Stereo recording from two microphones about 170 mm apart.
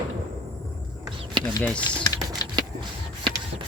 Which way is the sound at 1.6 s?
5° left (ahead or behind).